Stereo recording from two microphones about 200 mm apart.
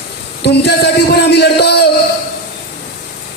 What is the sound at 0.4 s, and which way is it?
A man's voice, 55° left (ahead or behind).